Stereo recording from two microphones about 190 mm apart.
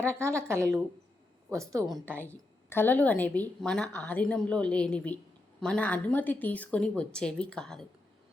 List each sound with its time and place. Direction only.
0.0 s a woman's voice: 15° right (ahead or behind)
2.6 s a woman's voice: 10° left (ahead or behind)